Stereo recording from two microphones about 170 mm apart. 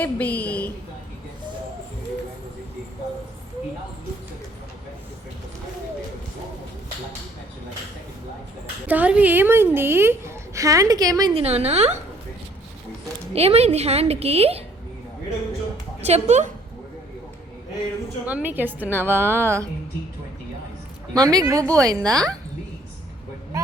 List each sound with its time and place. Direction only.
0.0 s a sound: 10° left (ahead or behind)
8.9 s a woman's voice: 10° right (ahead or behind)
11.3 s a woman's voice: 40° right (ahead or behind)
13.3 s a woman's voice: 35° right (ahead or behind)
16.0 s a woman's voice: 40° right (ahead or behind)
18.3 s a woman's voice: 10° right (ahead or behind)
21.1 s speech: 20° right (ahead or behind)